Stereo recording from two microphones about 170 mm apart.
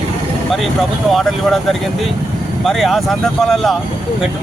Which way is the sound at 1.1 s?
Centre (ahead or behind).